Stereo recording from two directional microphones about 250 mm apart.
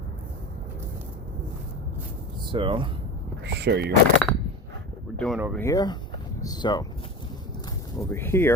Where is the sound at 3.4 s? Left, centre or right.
Right.